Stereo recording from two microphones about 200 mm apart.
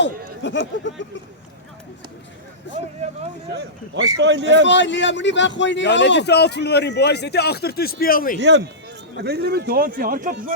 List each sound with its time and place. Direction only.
0.4 s a man's voice: 65° left (ahead or behind)
3.5 s speech: 55° right (ahead or behind)
4.6 s a man's voice: 65° left (ahead or behind); by 8.4 s 45° left (ahead or behind)
8.4 s speech: 60° right (ahead or behind); by 10.3 s 45° right (ahead or behind)